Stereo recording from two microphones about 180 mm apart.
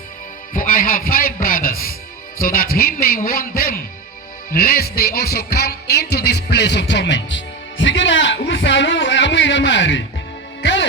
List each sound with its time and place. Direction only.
0.5 s a man's voice: 50° left (ahead or behind)
4.5 s music: 55° left (ahead or behind); by 10.0 s 90° left
10.6 s speech: 90° left